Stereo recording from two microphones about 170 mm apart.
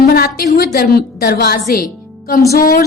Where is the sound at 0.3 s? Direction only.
60° left (ahead or behind).